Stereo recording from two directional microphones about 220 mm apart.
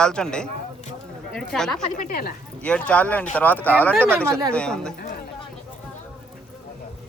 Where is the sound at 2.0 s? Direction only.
40° left (ahead or behind).